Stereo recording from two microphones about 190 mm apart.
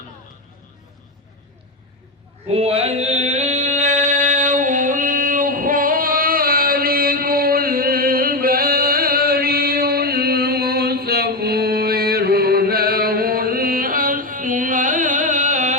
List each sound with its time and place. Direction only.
2.5 s mantra: 30° right (ahead or behind)